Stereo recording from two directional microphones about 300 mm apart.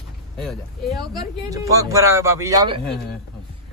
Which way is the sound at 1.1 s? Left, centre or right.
Centre.